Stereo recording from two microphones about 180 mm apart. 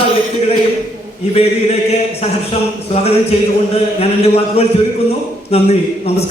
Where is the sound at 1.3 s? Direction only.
35° left (ahead or behind).